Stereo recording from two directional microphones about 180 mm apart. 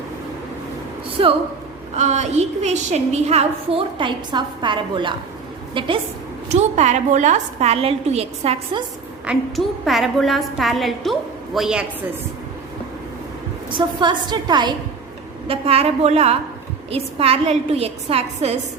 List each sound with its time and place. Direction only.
2.0 s a woman's voice: 40° right (ahead or behind)
6.5 s a woman's voice: 40° right (ahead or behind)
9.2 s a woman's voice: 5° right (ahead or behind)
13.7 s a woman's voice: 25° right (ahead or behind)